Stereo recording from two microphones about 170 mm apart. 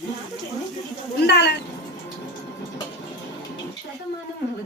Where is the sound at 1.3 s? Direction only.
80° left.